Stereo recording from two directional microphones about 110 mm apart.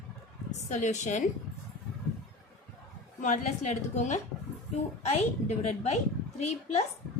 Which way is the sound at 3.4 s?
90° left.